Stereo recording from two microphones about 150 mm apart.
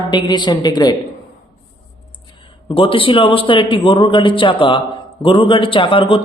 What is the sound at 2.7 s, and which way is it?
A man's voice, 35° left (ahead or behind).